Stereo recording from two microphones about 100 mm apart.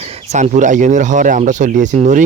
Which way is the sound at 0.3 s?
90° right.